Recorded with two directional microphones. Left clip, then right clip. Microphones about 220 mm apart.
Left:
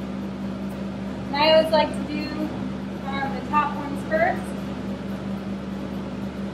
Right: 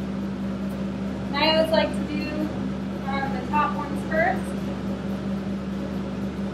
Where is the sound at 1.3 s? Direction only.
20° left (ahead or behind).